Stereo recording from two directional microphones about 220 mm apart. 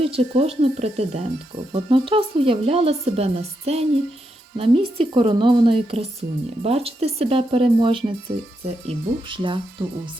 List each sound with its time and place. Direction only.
0.0 s speech: 25° right (ahead or behind)